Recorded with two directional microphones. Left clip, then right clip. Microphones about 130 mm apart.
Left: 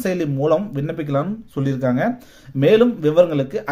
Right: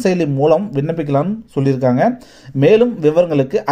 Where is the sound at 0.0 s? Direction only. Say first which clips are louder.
Right 6 dB; 25° right (ahead or behind).